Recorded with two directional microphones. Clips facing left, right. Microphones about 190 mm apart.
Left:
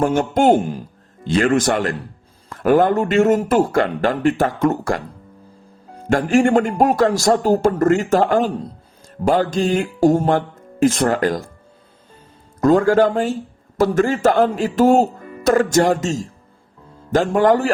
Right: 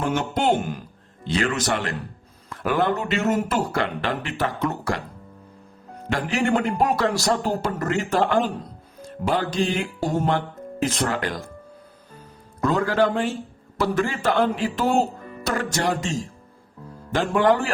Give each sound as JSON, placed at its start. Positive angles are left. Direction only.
{"t": 0.2, "sound": "a man's voice", "side_deg": 50}
{"t": 6.1, "sound": "a man's voice", "side_deg": 45}
{"t": 12.5, "sound": "a man's voice", "side_deg": 45}